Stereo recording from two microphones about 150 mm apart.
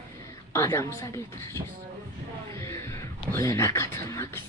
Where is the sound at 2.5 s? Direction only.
20° left (ahead or behind).